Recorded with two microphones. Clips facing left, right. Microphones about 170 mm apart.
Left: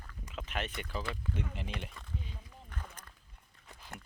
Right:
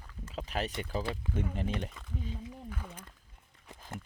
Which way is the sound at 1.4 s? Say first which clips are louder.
Right 6 dB; 50° right (ahead or behind).